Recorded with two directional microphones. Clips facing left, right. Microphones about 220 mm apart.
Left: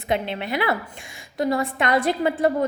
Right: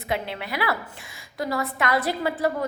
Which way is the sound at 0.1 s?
20° left (ahead or behind).